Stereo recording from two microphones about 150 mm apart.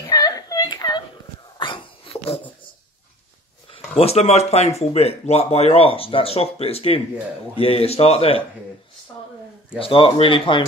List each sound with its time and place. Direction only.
0.0 s a sound: 25° left (ahead or behind)
1.6 s wail: 35° left (ahead or behind)
3.7 s speech: 40° left (ahead or behind)
9.8 s speech: 35° left (ahead or behind)